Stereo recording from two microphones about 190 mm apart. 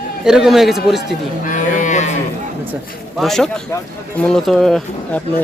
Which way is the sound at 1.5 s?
40° left (ahead or behind).